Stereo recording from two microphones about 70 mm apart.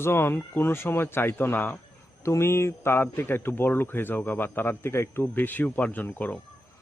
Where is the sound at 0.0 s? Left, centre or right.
Left.